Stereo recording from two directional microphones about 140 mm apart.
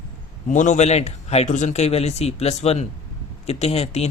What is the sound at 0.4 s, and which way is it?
Speech, 60° left (ahead or behind).